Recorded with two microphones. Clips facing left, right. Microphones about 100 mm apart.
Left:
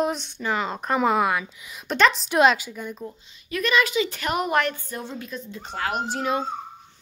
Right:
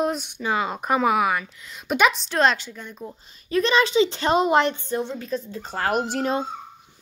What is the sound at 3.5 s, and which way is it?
A woman's voice, 30° right (ahead or behind).